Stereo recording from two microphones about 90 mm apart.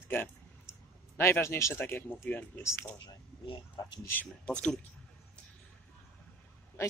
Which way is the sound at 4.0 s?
20° left (ahead or behind).